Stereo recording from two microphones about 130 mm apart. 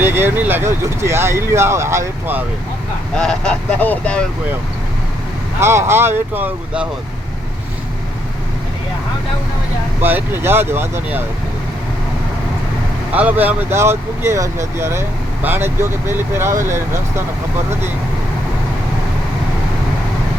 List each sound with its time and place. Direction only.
0.0 s speech: 15° right (ahead or behind)
3.2 s speech: 5° left (ahead or behind)
5.5 s speech: 20° right (ahead or behind)
10.0 s speech: 15° right (ahead or behind)
13.1 s speech: 10° right (ahead or behind)